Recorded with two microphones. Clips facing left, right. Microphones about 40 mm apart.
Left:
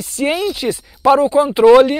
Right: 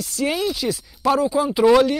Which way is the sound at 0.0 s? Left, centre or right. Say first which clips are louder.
Left 4 dB; left.